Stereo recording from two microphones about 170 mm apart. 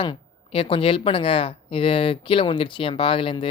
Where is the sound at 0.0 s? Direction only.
30° left (ahead or behind).